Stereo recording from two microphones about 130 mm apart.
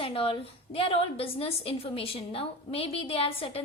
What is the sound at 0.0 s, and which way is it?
A woman's voice, 45° left (ahead or behind).